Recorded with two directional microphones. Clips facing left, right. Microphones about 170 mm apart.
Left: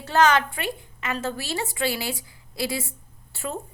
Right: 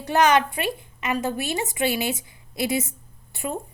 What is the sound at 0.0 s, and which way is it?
A woman's voice, 20° right (ahead or behind).